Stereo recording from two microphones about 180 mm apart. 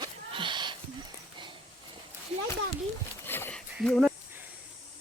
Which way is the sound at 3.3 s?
10° left (ahead or behind).